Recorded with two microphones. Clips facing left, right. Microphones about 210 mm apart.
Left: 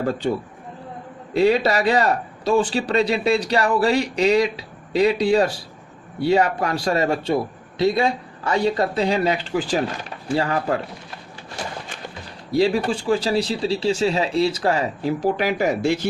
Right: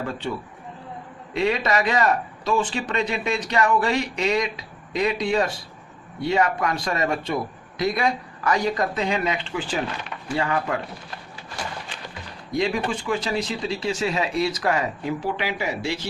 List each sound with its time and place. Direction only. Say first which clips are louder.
0.0 s a man's voice: left 6 dB; 40° left (ahead or behind)
12.5 s a man's voice: left 5 dB; 35° left (ahead or behind); by 16.0 s 50° left (ahead or behind)